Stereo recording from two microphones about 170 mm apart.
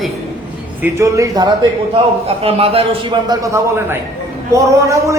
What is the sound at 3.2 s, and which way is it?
A man's voice, 20° right (ahead or behind).